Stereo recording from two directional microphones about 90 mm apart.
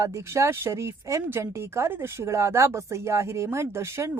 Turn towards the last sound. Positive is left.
turn(degrees=-30)  # may be behind; listen again after turning